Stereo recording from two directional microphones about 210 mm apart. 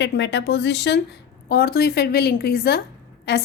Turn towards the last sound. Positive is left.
turn(degrees=50)  # may be behind; listen again after turning